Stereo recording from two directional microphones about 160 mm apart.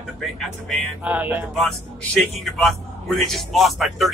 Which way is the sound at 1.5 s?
Centre (ahead or behind).